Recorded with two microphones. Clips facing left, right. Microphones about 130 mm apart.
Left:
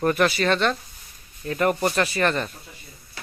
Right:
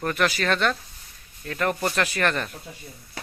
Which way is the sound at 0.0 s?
15° left (ahead or behind).